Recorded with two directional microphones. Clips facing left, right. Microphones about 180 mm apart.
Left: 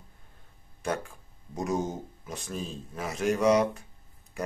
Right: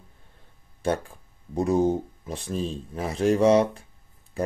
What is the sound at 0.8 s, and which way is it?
Speech, 35° right (ahead or behind).